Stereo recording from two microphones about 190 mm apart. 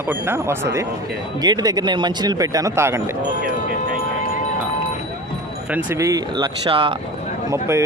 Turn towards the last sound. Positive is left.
turn(degrees=-15)  # may be behind; listen again after turning